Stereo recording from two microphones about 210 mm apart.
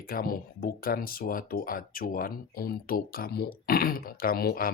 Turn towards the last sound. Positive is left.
turn(degrees=45)  # may be behind; listen again after turning